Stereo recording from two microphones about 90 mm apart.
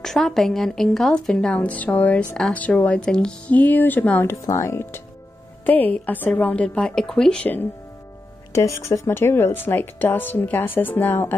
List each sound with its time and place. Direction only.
0.0 s a woman's voice: 5° left (ahead or behind)
4.3 s speech: 35° left (ahead or behind)
5.7 s a woman's voice: 20° left (ahead or behind)
8.5 s speech: 35° left (ahead or behind)